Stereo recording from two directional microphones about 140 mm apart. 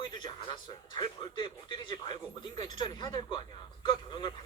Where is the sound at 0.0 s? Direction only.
30° left (ahead or behind).